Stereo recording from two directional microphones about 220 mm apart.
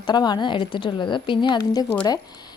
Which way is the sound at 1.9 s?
10° left (ahead or behind).